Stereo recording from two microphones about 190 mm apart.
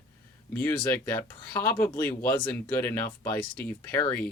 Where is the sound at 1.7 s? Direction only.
10° left (ahead or behind).